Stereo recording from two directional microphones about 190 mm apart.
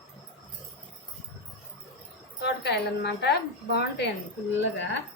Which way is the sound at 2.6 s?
60° left (ahead or behind).